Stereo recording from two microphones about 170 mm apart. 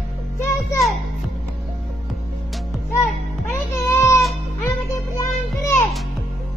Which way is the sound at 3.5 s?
15° left (ahead or behind).